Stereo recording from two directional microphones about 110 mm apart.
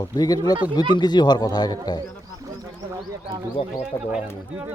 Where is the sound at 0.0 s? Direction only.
35° left (ahead or behind).